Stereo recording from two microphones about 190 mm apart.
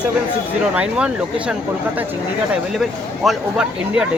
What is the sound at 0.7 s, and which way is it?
Speech, 5° right (ahead or behind).